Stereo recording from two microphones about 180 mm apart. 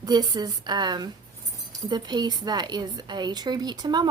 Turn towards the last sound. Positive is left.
turn(degrees=-25)  # may be behind; listen again after turning